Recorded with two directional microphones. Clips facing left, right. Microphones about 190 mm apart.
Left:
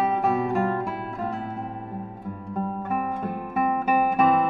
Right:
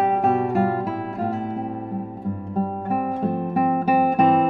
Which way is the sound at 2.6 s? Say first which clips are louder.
Right 3 dB; 35° right (ahead or behind).